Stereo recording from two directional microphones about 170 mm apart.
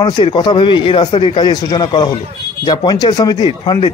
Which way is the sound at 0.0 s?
25° left (ahead or behind).